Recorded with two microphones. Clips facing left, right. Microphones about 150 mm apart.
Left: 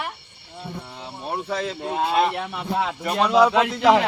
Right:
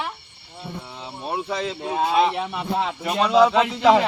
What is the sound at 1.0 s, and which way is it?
A man's voice, centre (ahead or behind).